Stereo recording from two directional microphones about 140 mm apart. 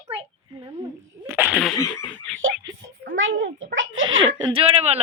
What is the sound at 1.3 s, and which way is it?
Sneeze, 15° right (ahead or behind).